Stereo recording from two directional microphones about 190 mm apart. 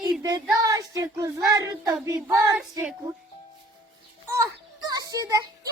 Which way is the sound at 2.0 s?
15° right (ahead or behind).